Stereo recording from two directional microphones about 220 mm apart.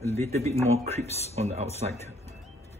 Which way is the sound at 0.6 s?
30° right (ahead or behind).